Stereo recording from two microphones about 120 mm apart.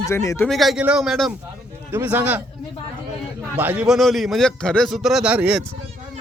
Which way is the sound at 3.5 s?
15° right (ahead or behind).